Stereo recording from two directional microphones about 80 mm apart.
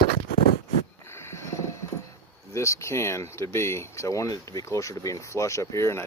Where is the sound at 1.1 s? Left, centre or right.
Left.